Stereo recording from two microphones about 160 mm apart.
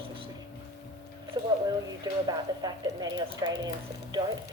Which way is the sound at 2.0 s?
25° right (ahead or behind).